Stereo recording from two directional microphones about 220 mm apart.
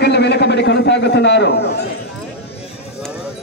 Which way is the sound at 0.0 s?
50° left (ahead or behind).